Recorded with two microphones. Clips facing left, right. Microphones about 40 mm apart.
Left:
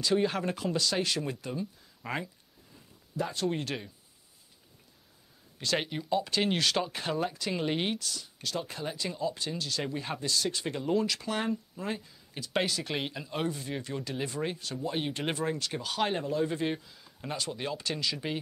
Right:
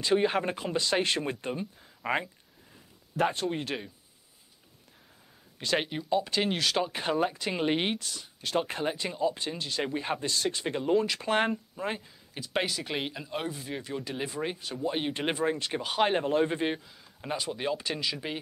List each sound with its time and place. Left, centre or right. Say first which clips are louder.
0.0 s speech: right 2 dB; right
3.4 s speech: even; centre
5.6 s speech: right 2 dB; centre
6.9 s speech: right 4 dB; centre
8.5 s speech: right 7 dB; right
8.9 s speech: right 3 dB; right
11.2 s speech: right 5 dB; right
11.7 s speech: right 2 dB; right
12.4 s speech: even; centre; by 16.3 s right
16.3 s speech: right 4 dB; right
16.5 s speech: right 1 dB; centre